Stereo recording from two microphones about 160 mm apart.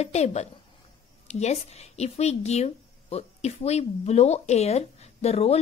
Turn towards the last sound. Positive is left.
turn(degrees=40)  # may be behind; listen again after turning